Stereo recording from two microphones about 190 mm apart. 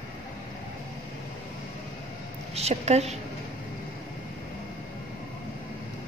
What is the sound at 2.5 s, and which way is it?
Speech, 35° right (ahead or behind).